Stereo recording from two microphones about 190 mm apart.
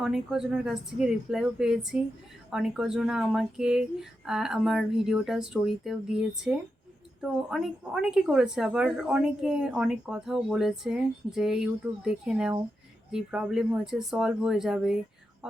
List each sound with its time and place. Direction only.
0.0 s a woman's voice: 5° right (ahead or behind)